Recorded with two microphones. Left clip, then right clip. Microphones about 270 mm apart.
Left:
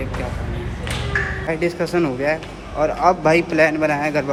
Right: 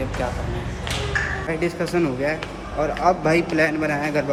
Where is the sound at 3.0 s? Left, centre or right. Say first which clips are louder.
Left 3 dB; centre.